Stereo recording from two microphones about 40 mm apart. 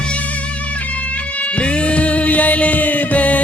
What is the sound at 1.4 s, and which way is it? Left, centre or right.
Music, left.